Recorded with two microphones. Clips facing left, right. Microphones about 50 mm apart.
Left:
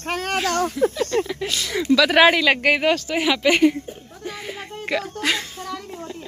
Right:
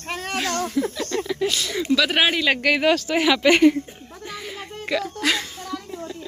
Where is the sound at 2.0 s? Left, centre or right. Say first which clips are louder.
Left 8 dB; left.